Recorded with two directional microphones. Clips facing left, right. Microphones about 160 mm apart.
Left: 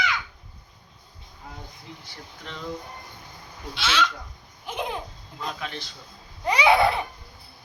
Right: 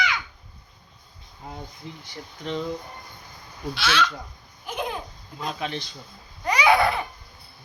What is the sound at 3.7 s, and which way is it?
Speech, 20° left (ahead or behind).